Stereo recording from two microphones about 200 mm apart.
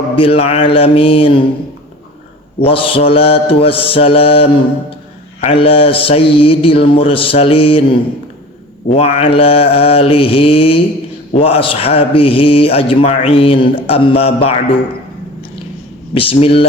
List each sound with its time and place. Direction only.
0.2 s a man's voice: 30° left (ahead or behind)
2.6 s a man's voice: 25° left (ahead or behind)
16.1 s a man's voice: 25° left (ahead or behind)